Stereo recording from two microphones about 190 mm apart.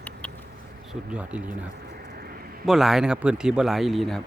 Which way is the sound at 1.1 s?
5° right (ahead or behind).